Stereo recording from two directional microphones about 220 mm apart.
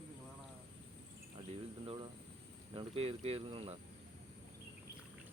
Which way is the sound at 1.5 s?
25° right (ahead or behind).